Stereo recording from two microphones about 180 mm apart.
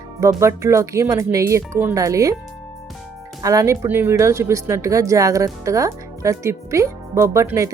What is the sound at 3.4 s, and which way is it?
Speech, 20° right (ahead or behind).